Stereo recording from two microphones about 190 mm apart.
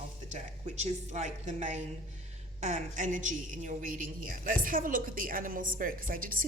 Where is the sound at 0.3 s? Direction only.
35° right (ahead or behind).